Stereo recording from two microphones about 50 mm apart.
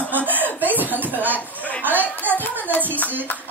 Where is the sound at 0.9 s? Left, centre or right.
Right.